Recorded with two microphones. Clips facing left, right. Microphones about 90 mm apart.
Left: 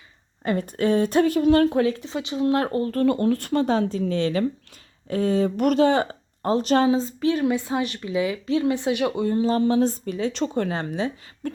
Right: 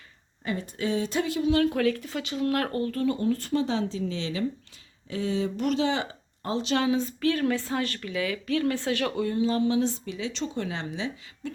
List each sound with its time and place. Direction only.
0.4 s speech: 55° left (ahead or behind)
1.7 s speech: 25° left (ahead or behind)
2.9 s speech: 55° left (ahead or behind); by 7.1 s 30° left (ahead or behind)
7.2 s a woman's voice: 20° left (ahead or behind)
9.2 s speech: 35° left (ahead or behind)